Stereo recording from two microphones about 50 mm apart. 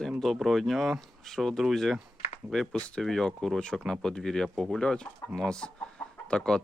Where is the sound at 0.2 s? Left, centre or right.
Centre.